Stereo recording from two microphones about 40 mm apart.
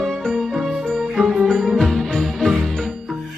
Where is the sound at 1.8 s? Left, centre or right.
Centre.